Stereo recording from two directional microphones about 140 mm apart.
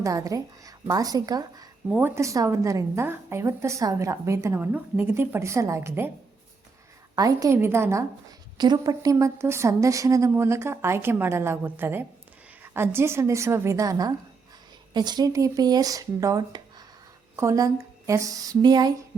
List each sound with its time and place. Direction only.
0.0 s a woman's voice: 25° right (ahead or behind)
7.2 s a woman's voice: 25° right (ahead or behind)
8.5 s a woman's voice: 30° right (ahead or behind)